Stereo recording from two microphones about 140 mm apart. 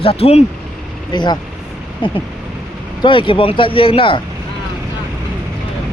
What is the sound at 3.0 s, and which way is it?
Speech, 35° left (ahead or behind).